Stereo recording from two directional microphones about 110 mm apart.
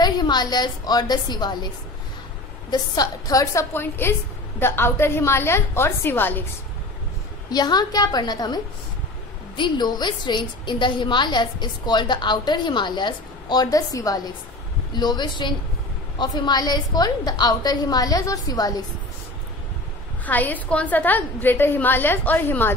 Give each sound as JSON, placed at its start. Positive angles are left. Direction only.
{"t": 0.0, "sound": "a woman's voice", "side_deg": 40}
{"t": 2.7, "sound": "a woman's voice", "side_deg": 35}
{"t": 3.7, "sound": "a woman's voice", "side_deg": 20}
{"t": 7.5, "sound": "a woman's voice", "side_deg": 40}
{"t": 9.6, "sound": "a woman's voice", "side_deg": 40}
{"t": 20.2, "sound": "a woman's voice", "side_deg": 15}